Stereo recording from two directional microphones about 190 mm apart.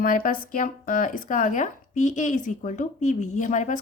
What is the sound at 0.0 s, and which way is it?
A woman's voice, 45° left (ahead or behind).